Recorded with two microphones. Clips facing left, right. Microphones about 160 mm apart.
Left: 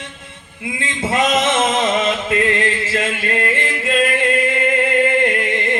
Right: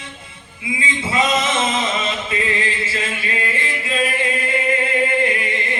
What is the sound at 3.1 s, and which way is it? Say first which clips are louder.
Singing: left 5 dB; 70° left (ahead or behind).